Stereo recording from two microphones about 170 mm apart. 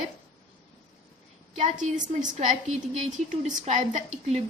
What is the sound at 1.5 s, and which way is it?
Speech, 45° right (ahead or behind).